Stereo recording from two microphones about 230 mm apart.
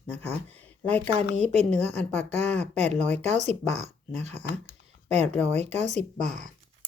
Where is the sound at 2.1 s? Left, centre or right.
Centre.